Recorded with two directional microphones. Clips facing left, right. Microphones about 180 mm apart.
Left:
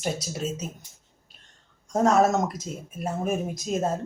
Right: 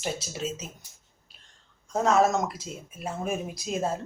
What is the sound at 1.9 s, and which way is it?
Speech, 45° left (ahead or behind).